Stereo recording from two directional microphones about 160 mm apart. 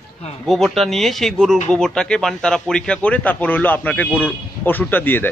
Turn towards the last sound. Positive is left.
turn(degrees=10)  # may be behind; listen again after turning